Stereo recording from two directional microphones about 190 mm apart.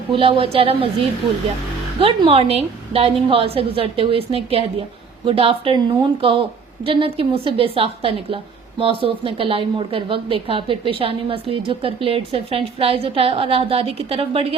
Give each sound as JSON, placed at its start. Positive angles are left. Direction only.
{"t": 0.1, "sound": "a woman's voice", "side_deg": -30}